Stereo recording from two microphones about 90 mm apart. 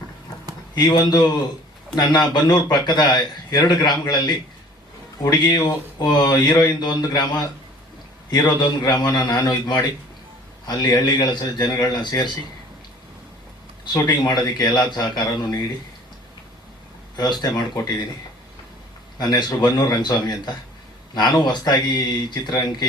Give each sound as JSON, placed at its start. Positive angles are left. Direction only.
{"t": 0.8, "sound": "a man's voice", "side_deg": 50}
{"t": 5.3, "sound": "a man's voice", "side_deg": 50}
{"t": 13.8, "sound": "a man's voice", "side_deg": 50}
{"t": 17.2, "sound": "a man's voice", "side_deg": 50}
{"t": 19.2, "sound": "a man's voice", "side_deg": 45}